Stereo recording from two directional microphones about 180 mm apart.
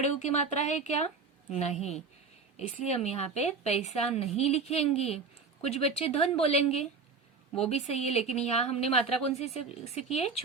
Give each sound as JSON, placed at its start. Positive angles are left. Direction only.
{"t": 0.0, "sound": "speech", "side_deg": 40}
{"t": 2.6, "sound": "speech", "side_deg": 35}